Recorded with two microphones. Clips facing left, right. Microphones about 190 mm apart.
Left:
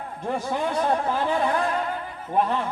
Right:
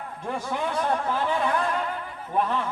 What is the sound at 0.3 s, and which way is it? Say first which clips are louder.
A man's voice: left 3 dB; 40° left (ahead or behind).